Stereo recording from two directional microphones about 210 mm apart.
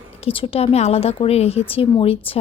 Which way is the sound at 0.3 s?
25° left (ahead or behind).